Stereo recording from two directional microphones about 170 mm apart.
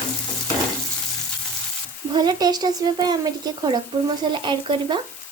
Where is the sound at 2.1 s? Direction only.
25° right (ahead or behind).